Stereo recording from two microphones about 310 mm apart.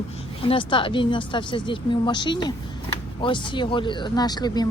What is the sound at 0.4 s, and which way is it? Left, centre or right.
Speech, centre.